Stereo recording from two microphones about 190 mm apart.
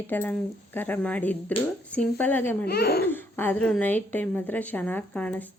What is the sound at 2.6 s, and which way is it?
Speech, 55° left (ahead or behind).